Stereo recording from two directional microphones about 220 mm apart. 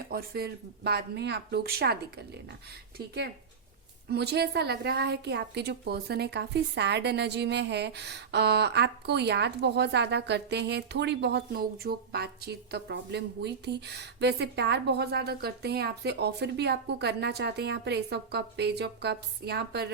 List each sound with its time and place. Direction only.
0.1 s a woman's voice: 45° right (ahead or behind)
4.1 s a woman's voice: 50° right (ahead or behind)